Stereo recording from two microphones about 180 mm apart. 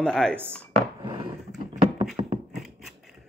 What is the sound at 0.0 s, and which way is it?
Speech, 5° left (ahead or behind).